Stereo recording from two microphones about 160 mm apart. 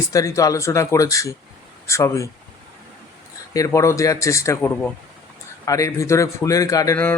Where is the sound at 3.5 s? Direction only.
20° left (ahead or behind).